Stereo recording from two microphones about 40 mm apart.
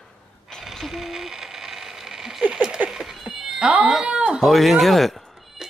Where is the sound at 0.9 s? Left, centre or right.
Centre.